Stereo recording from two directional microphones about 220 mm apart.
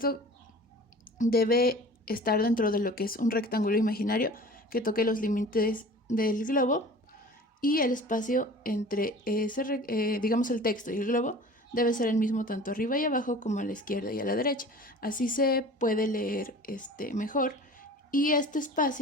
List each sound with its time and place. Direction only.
1.2 s speech: 40° left (ahead or behind)